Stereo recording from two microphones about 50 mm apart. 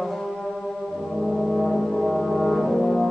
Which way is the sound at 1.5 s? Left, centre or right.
Centre.